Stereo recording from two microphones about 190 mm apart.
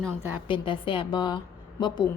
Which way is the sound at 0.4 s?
25° left (ahead or behind).